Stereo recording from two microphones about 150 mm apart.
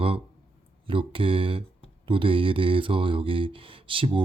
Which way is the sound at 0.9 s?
35° right (ahead or behind).